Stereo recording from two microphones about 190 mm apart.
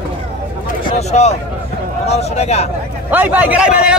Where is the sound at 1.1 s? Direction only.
35° left (ahead or behind).